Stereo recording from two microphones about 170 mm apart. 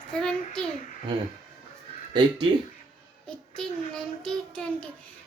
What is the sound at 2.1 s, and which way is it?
Speech, 30° right (ahead or behind).